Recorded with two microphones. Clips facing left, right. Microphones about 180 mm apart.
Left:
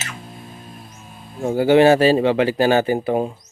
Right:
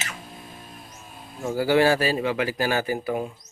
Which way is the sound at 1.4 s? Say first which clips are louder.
Left 7 dB; 30° left (ahead or behind).